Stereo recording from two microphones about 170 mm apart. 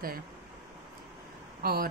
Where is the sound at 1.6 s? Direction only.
60° right (ahead or behind).